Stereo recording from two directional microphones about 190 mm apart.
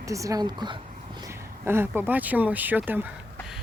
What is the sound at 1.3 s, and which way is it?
Speech, 10° right (ahead or behind).